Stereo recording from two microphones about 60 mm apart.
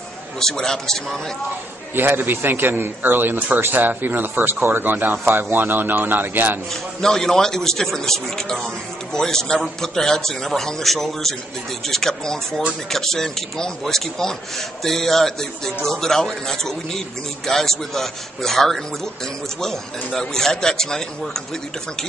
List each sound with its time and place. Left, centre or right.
0.4 s a man's voice: centre
2.0 s a man's voice: right
6.7 s a man's voice: centre